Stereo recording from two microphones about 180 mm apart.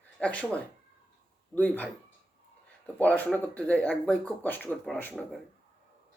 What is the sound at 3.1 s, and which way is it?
Speech, 5° left (ahead or behind).